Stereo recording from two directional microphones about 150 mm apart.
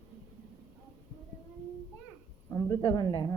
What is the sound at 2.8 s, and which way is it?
Speech, 30° left (ahead or behind).